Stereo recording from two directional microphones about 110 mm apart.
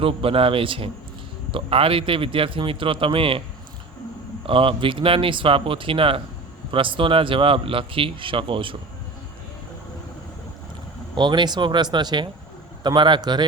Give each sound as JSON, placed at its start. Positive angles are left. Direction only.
{"t": 0.0, "sound": "speech", "side_deg": -55}
{"t": 4.4, "sound": "speech", "side_deg": -55}
{"t": 11.1, "sound": "speech", "side_deg": -45}